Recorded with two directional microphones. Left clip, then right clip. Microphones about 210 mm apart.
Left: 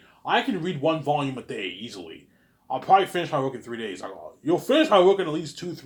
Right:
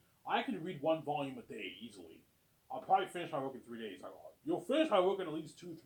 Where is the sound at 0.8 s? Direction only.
30° left (ahead or behind).